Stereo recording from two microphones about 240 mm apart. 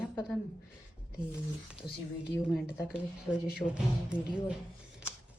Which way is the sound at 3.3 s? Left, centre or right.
Centre.